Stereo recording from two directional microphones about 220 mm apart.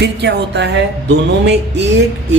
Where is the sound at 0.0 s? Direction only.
50° right (ahead or behind).